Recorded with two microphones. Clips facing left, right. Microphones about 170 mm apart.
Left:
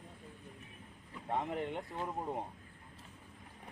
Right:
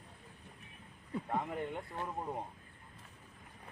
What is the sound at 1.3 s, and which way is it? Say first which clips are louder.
Speech: left 2 dB; 25° left (ahead or behind).